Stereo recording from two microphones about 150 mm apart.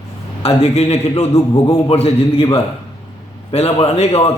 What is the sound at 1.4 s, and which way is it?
Speech, 20° left (ahead or behind).